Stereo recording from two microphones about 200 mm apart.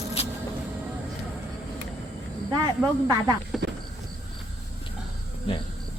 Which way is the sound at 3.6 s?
60° right (ahead or behind).